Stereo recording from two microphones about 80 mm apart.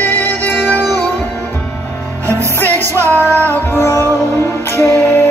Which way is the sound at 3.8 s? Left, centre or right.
Left.